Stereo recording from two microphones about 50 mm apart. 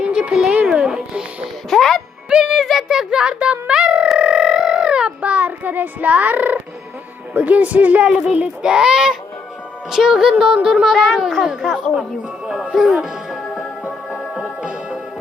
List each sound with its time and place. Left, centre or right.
0.0 s a sound: centre
0.8 s speech: centre
1.7 s a child's voice: centre
2.3 s speech: centre
4.2 s a sound: centre
7.3 s speech: right
8.0 s speech: centre
10.9 s a child's voice: centre
11.4 s speech: centre
12.7 s music: centre
14.3 s music: right